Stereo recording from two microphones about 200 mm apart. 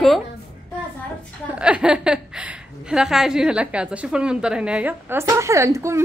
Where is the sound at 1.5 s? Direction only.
5° right (ahead or behind).